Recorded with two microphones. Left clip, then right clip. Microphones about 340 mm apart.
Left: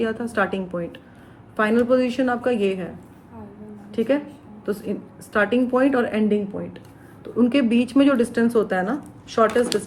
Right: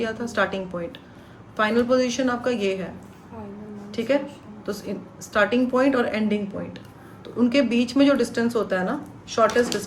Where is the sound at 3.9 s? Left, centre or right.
Centre.